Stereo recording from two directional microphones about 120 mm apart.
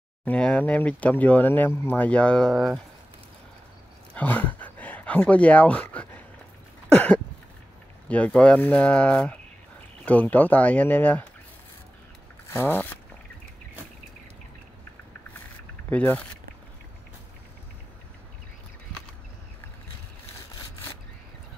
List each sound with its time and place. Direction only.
0.2 s speech: 10° left (ahead or behind)
4.1 s speech: 15° left (ahead or behind)
8.1 s speech: 10° left (ahead or behind)
12.5 s speech: 15° left (ahead or behind)
15.9 s speech: 15° left (ahead or behind)